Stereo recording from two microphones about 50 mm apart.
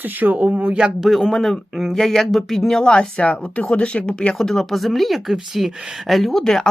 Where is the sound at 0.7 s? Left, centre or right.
Right.